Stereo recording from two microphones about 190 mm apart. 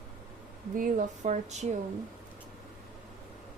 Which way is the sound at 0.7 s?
45° right (ahead or behind).